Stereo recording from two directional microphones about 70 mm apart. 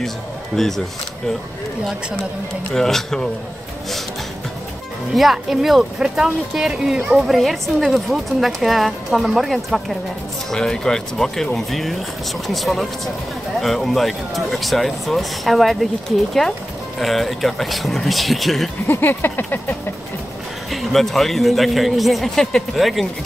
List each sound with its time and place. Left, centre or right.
0.6 s speech: centre
2.7 s speech: centre
5.1 s speech: centre
17.0 s speech: centre
18.9 s a sound: left
20.7 s speech: centre